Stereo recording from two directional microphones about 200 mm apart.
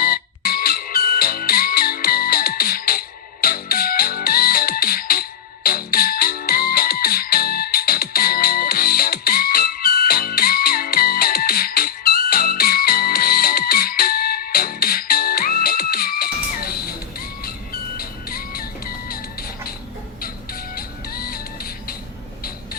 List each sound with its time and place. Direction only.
0.0 s music: 50° left (ahead or behind)